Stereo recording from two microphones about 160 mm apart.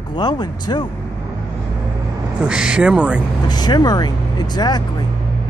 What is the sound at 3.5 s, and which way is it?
Speech, 25° left (ahead or behind).